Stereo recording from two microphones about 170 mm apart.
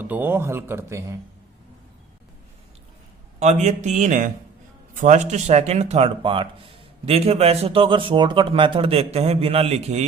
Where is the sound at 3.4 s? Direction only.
40° right (ahead or behind).